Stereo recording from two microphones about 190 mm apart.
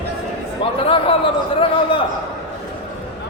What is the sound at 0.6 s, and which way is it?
A man's voice, 30° left (ahead or behind).